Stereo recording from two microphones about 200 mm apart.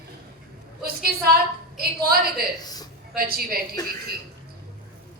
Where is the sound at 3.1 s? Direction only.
50° right (ahead or behind).